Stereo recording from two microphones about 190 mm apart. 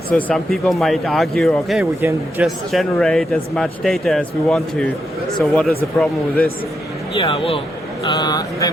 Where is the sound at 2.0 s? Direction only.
10° right (ahead or behind).